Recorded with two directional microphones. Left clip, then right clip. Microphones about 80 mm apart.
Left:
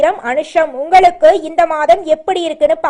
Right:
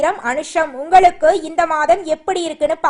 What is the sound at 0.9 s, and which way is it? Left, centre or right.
Speech, centre.